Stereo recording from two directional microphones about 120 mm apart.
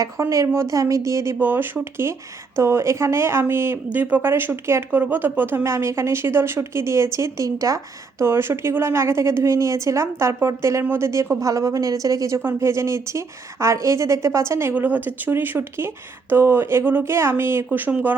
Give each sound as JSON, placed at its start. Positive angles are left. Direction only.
{"t": 0.0, "sound": "speech", "side_deg": -25}